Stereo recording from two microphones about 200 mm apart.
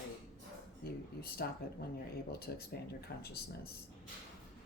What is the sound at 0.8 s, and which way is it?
Speech, 50° left (ahead or behind).